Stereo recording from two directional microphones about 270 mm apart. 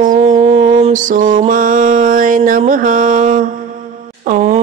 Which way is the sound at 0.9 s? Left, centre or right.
Right.